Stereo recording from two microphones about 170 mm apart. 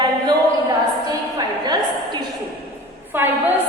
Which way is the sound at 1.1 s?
25° right (ahead or behind).